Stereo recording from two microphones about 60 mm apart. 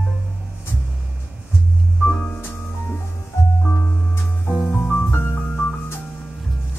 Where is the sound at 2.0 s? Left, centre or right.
Left.